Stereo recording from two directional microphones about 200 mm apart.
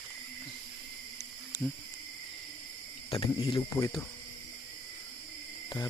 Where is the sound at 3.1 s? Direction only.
25° left (ahead or behind).